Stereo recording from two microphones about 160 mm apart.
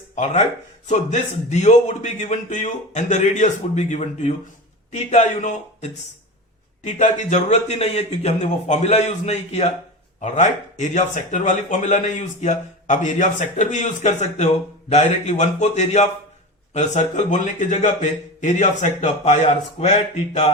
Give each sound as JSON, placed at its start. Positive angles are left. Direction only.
{"t": 0.9, "sound": "speech", "side_deg": 45}